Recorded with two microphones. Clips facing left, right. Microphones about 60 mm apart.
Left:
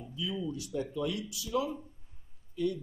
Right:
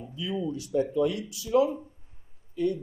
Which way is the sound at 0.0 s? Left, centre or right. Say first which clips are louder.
Right 4 dB; right.